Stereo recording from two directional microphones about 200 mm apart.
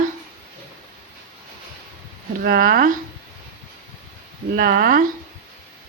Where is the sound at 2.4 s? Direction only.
45° right (ahead or behind).